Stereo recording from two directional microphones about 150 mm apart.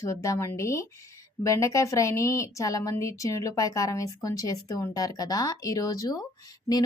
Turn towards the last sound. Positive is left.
turn(degrees=25)  # may be behind; listen again after turning